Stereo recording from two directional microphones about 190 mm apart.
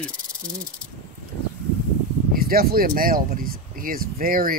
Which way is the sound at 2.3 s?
50° right (ahead or behind).